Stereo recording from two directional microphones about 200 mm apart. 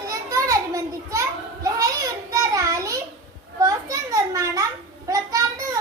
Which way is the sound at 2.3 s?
15° right (ahead or behind).